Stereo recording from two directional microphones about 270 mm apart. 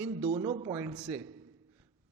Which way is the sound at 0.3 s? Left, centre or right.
Centre.